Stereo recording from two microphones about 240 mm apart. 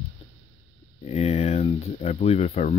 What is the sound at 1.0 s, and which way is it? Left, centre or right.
Speech, left.